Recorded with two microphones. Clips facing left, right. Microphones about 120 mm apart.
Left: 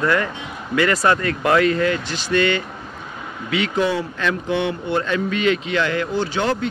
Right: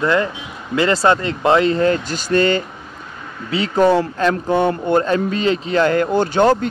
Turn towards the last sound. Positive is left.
turn(degrees=-45)  # may be behind; listen again after turning